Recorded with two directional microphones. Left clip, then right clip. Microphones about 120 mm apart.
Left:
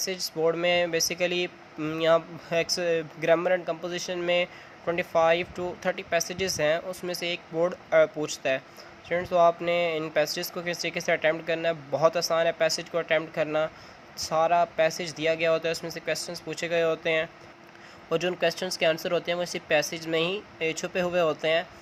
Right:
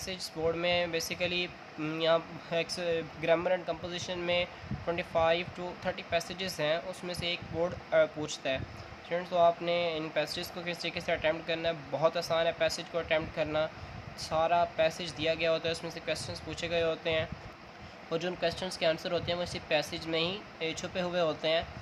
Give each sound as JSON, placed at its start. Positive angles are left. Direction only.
{"t": 0.0, "sound": "speech", "side_deg": 60}
{"t": 18.1, "sound": "speech", "side_deg": 65}